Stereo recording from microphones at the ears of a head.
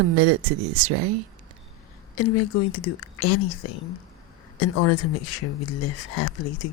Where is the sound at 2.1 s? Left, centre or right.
Left.